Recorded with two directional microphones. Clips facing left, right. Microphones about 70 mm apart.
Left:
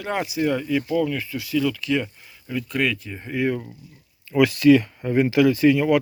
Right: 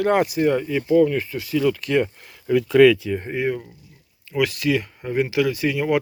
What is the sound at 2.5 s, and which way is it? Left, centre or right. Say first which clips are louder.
Speech: right 11 dB; right.